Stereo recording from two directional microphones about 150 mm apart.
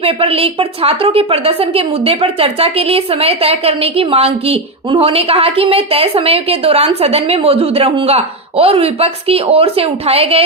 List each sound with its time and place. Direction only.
0.0 s a woman's voice: 40° right (ahead or behind)